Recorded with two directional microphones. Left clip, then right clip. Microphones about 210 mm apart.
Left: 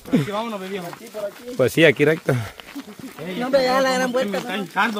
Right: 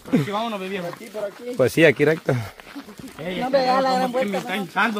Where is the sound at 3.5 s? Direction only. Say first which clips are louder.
Left 1 dB; 60° left (ahead or behind).